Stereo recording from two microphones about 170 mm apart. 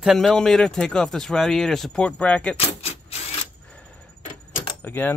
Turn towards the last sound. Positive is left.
turn(degrees=10)  # may be behind; listen again after turning